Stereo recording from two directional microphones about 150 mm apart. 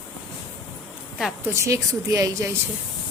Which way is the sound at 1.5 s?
20° right (ahead or behind).